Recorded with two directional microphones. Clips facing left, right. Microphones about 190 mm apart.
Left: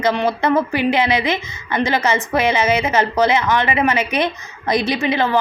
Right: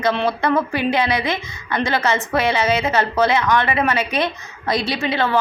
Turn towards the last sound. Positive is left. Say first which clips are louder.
# left 2 dB
turn(degrees=15)  # may be behind; listen again after turning